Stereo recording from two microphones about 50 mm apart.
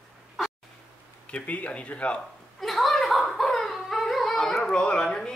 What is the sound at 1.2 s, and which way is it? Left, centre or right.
Speech, left.